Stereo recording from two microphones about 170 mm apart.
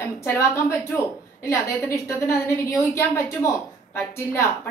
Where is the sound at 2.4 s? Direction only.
15° left (ahead or behind).